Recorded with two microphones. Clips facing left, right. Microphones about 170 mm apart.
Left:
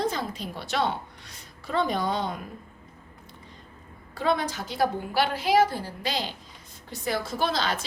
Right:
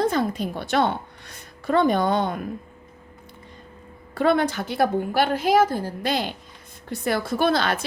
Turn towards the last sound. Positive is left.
turn(degrees=-55)  # may be behind; listen again after turning